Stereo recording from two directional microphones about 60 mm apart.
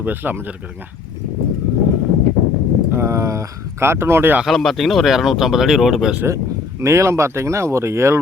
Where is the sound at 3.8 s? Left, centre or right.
Right.